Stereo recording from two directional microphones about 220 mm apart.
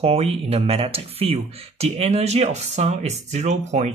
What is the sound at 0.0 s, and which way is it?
Speech, 25° right (ahead or behind).